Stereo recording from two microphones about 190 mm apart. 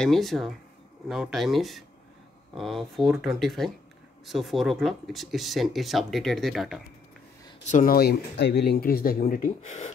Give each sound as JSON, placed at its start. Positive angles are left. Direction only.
{"t": 0.0, "sound": "speech", "side_deg": 0}
{"t": 7.7, "sound": "speech", "side_deg": 50}